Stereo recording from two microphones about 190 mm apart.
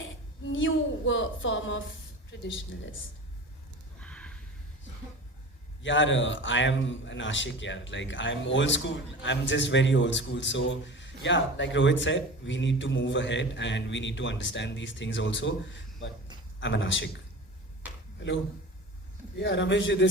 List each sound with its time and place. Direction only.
0.5 s a sound: 90° left
2.4 s speech: 90° left
4.0 s a sound: 5° left (ahead or behind)
5.8 s a man's voice: 75° left (ahead or behind)
16.6 s a man's voice: 70° left (ahead or behind)
19.4 s a man's voice: 70° left (ahead or behind)